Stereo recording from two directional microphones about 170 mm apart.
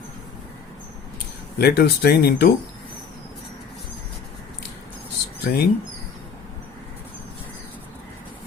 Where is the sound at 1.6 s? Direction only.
70° left (ahead or behind).